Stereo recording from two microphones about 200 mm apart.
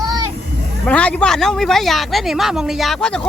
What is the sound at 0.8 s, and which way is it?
Speech, 5° left (ahead or behind).